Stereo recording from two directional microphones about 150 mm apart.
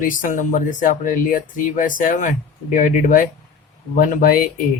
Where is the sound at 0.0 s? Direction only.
65° left (ahead or behind).